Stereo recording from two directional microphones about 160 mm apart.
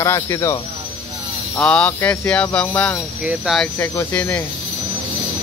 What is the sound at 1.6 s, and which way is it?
Speech, 5° left (ahead or behind).